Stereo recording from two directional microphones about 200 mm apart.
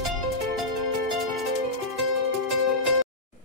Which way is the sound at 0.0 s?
Centre (ahead or behind).